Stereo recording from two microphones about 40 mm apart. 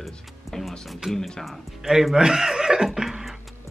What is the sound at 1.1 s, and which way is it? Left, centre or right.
Speech, centre.